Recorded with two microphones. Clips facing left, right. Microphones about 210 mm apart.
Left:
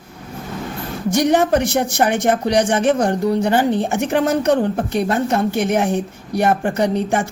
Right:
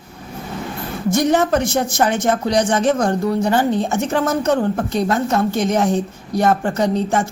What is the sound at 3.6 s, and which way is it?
Speech, 15° left (ahead or behind).